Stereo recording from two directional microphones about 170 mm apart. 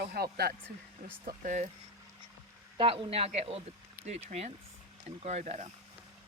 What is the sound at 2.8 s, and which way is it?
Speech, 30° right (ahead or behind).